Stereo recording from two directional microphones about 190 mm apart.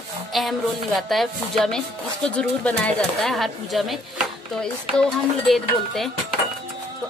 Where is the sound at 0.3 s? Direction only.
Centre (ahead or behind).